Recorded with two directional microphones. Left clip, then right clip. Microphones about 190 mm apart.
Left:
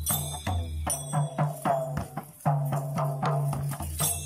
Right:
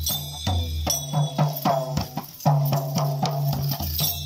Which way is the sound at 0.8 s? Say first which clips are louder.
Right 5 dB; 15° right (ahead or behind).